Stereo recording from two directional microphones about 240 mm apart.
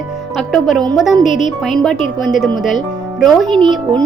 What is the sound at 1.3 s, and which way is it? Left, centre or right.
Speech, left.